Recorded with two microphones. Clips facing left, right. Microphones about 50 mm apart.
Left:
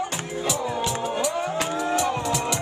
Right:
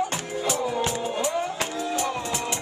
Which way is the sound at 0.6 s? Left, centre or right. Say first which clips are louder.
Right 1 dB; centre.